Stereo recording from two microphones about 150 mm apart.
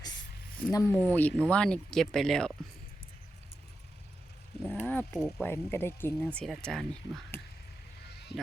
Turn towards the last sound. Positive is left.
turn(degrees=5)  # may be behind; listen again after turning